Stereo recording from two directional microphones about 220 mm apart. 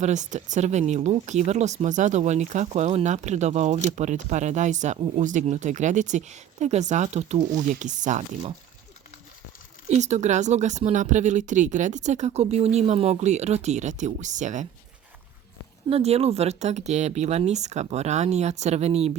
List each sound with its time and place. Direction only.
0.0 s speech: 35° right (ahead or behind)
9.9 s speech: 30° right (ahead or behind)
15.9 s speech: 30° right (ahead or behind)